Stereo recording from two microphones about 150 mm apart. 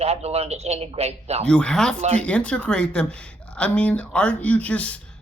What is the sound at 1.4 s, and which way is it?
Speech, 5° left (ahead or behind).